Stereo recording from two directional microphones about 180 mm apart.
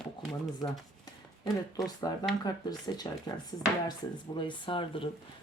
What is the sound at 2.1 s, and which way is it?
Speech, 20° left (ahead or behind).